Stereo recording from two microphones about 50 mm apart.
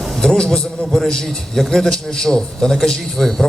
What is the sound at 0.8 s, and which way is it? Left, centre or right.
A man's voice, centre.